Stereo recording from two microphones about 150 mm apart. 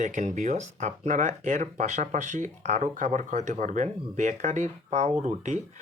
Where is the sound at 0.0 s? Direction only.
55° right (ahead or behind).